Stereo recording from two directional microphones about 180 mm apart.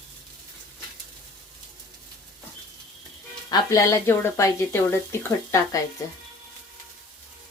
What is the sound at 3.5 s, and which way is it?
Speech, 20° left (ahead or behind).